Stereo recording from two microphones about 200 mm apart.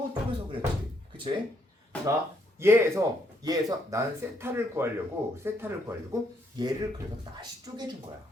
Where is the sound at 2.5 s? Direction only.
15° right (ahead or behind).